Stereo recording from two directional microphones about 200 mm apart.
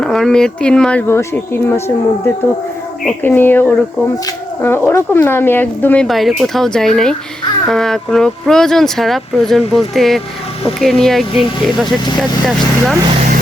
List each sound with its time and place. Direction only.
0.0 s speech: centre (ahead or behind)
3.0 s speech: 5° left (ahead or behind)